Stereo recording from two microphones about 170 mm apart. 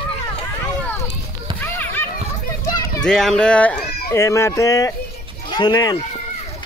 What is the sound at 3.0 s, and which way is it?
Speech, 5° left (ahead or behind).